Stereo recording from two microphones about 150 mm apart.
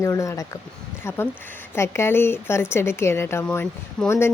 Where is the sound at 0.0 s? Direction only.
20° left (ahead or behind).